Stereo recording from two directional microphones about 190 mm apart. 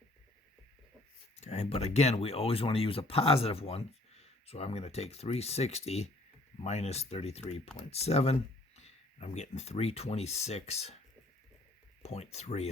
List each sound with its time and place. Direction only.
1.4 s speech: 35° left (ahead or behind)
12.0 s speech: 35° left (ahead or behind)